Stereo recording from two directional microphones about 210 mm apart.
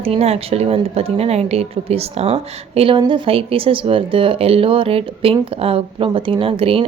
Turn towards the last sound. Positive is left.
turn(degrees=-25)  # may be behind; listen again after turning